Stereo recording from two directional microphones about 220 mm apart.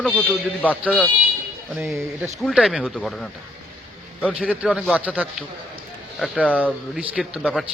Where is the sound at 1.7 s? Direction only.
5° right (ahead or behind).